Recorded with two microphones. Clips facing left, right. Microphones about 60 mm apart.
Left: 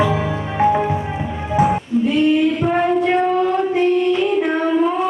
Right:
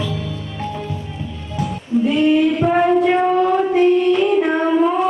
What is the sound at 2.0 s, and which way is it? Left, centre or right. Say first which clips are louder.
Female singing: right 1 dB; centre.